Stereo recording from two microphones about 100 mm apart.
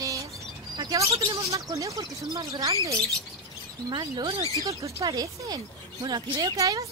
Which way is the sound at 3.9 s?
50° right (ahead or behind).